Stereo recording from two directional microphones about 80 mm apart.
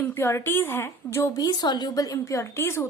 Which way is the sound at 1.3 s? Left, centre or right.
Left.